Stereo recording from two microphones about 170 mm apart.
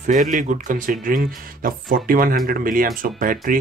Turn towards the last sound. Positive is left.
turn(degrees=-55)  # may be behind; listen again after turning